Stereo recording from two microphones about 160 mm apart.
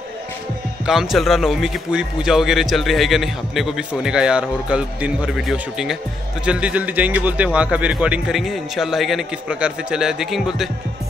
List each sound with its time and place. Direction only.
0.8 s a man's voice: centre (ahead or behind)